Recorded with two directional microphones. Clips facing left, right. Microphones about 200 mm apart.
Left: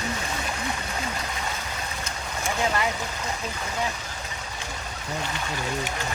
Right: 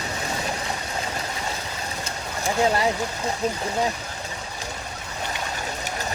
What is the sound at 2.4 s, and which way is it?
Speech, 35° right (ahead or behind).